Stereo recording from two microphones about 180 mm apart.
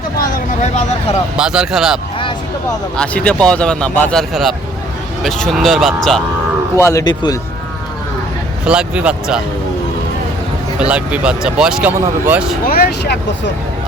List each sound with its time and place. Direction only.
1.4 s speech: 5° right (ahead or behind)
6.7 s a man's voice: 15° left (ahead or behind)
8.6 s speech: 5° right (ahead or behind)
10.8 s speech: 5° right (ahead or behind)
12.6 s speech: 55° left (ahead or behind)